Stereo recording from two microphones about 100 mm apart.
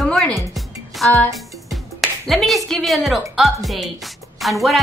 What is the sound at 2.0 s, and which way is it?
Speech, centre (ahead or behind).